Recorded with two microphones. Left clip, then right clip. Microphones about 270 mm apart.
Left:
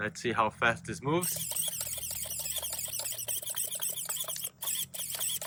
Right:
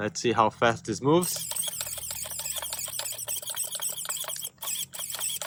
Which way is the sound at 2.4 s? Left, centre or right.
Centre.